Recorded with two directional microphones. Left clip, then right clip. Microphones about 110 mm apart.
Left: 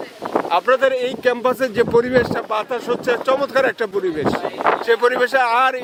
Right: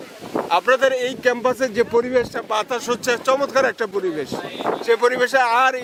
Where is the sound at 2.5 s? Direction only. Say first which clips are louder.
Left 1 dB; 10° right (ahead or behind).